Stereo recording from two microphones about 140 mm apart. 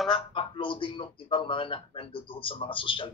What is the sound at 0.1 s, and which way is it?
Speech, 40° left (ahead or behind).